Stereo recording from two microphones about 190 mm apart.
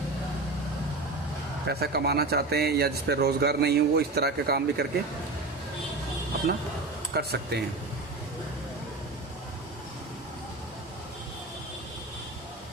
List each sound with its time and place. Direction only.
1.6 s speech: 55° right (ahead or behind)
7.1 s speech: 55° right (ahead or behind)